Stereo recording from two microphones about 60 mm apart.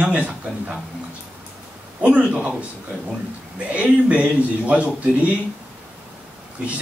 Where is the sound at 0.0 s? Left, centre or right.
Right.